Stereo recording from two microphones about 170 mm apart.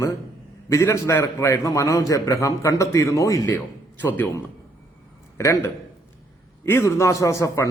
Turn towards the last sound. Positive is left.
turn(degrees=20)  # may be behind; listen again after turning